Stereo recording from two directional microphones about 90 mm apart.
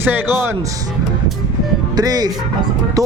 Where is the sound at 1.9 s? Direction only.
45° right (ahead or behind).